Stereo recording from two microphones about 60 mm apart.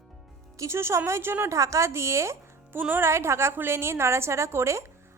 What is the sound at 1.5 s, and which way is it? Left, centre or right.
A woman's voice, right.